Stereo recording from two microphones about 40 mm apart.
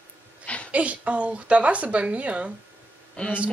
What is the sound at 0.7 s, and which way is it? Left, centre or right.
Speech, right.